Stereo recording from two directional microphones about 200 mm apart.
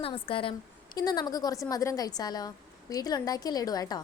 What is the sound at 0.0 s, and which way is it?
A woman's voice, 25° left (ahead or behind).